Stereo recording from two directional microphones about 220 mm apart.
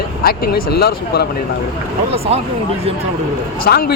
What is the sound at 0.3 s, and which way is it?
Speech, 45° left (ahead or behind).